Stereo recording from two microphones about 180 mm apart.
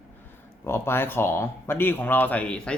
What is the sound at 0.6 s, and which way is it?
Speech, 15° left (ahead or behind).